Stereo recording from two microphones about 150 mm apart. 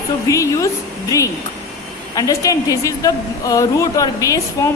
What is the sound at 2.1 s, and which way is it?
A woman's voice, 25° left (ahead or behind).